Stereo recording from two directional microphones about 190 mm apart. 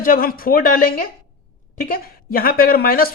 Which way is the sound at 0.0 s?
50° left (ahead or behind).